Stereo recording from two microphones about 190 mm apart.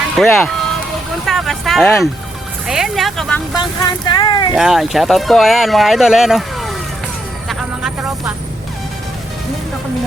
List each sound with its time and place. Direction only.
0.2 s speech: centre (ahead or behind)
3.5 s speech: 20° left (ahead or behind)
4.5 s speech: centre (ahead or behind)
7.4 s vehicle: centre (ahead or behind)